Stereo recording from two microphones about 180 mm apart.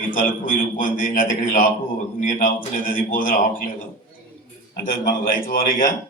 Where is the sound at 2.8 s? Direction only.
50° left (ahead or behind).